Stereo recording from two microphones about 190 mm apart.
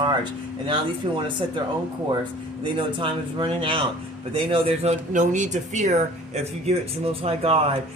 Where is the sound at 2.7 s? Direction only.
25° right (ahead or behind).